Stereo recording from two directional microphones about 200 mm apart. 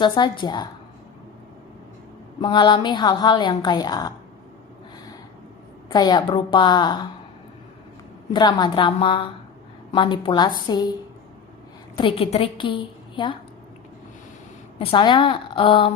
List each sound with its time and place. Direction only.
0.0 s a woman's voice: 20° left (ahead or behind)
2.4 s a woman's voice: 20° left (ahead or behind)
5.9 s a woman's voice: 20° left (ahead or behind)
8.3 s a woman's voice: 20° left (ahead or behind)
11.9 s a woman's voice: 25° left (ahead or behind)
14.8 s a woman's voice: 25° left (ahead or behind)